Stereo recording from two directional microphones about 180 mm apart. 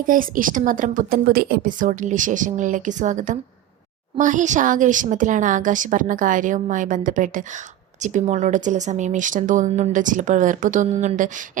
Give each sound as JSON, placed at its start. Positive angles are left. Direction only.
{"t": 0.0, "sound": "speech", "side_deg": -50}